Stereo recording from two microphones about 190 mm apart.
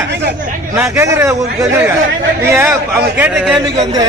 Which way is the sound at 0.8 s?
15° right (ahead or behind).